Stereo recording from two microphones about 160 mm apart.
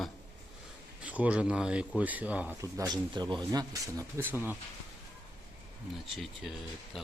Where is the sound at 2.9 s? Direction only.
25° right (ahead or behind).